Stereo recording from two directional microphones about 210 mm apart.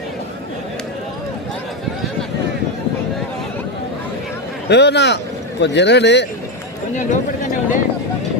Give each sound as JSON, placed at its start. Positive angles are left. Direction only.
{"t": 4.7, "sound": "speech", "side_deg": 55}
{"t": 6.9, "sound": "speech", "side_deg": 35}